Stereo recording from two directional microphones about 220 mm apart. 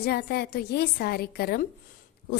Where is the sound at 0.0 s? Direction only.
45° left (ahead or behind).